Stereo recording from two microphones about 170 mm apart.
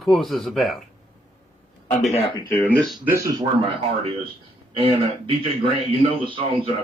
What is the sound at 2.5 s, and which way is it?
Speech, 10° left (ahead or behind).